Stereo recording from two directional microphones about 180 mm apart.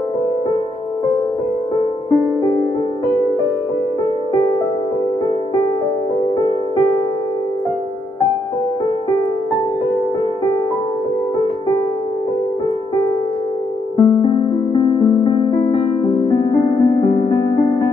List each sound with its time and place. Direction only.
13.9 s music: 25° left (ahead or behind)